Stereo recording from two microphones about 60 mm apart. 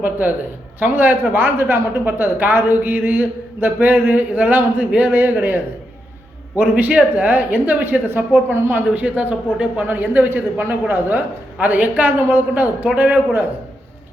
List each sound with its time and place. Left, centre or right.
0.0 s speech: right
8.9 s a man's voice: right
9.8 s a man's voice: right